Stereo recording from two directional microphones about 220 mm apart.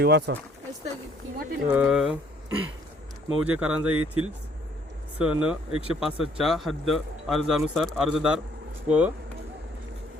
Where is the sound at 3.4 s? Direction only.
5° right (ahead or behind).